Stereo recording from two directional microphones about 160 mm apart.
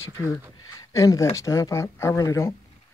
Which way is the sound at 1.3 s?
20° left (ahead or behind).